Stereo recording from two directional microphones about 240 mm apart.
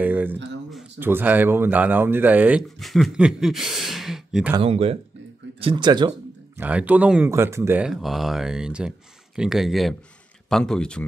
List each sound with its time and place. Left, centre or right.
0.0 s a sound: centre
0.7 s speech: centre
4.6 s speech: right
6.6 s speech: centre